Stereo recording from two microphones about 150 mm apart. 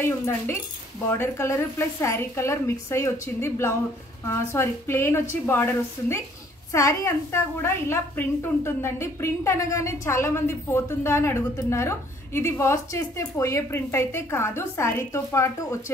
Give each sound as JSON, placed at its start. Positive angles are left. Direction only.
{"t": 0.0, "sound": "a woman's voice", "side_deg": 15}